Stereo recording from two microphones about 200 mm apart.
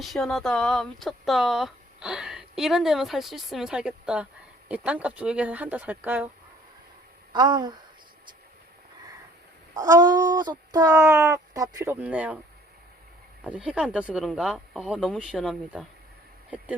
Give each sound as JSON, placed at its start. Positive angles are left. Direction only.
{"t": 0.0, "sound": "speech", "side_deg": 0}
{"t": 7.3, "sound": "speech", "side_deg": -20}
{"t": 9.7, "sound": "speech", "side_deg": -15}
{"t": 13.4, "sound": "speech", "side_deg": -5}